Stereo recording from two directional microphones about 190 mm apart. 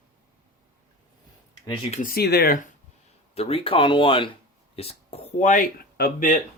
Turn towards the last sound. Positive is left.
turn(degrees=45)  # may be behind; listen again after turning